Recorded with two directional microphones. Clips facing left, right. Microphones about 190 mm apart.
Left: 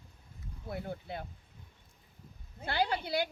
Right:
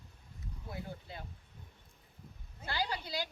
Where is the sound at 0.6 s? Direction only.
60° left (ahead or behind).